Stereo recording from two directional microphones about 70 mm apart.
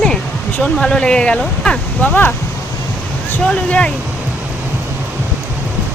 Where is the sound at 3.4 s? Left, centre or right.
Centre.